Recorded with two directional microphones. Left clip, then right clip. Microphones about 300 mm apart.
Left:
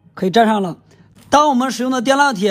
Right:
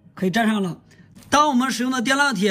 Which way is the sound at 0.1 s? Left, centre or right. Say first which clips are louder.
Left 8 dB; centre.